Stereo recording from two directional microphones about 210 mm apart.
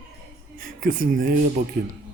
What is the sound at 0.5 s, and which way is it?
Speech, 40° right (ahead or behind).